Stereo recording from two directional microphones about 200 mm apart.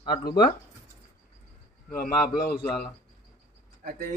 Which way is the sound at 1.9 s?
50° left (ahead or behind).